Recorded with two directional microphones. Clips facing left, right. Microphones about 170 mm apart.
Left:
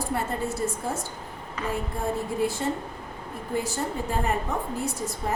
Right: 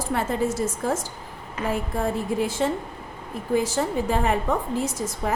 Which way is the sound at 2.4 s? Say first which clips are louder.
Right 2 dB; 90° right.